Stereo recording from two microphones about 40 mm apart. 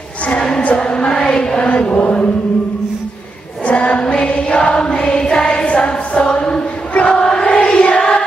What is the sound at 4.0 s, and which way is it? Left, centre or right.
Choir, left.